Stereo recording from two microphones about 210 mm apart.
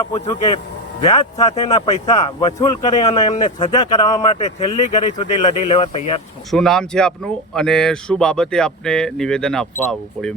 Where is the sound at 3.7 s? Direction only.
20° left (ahead or behind).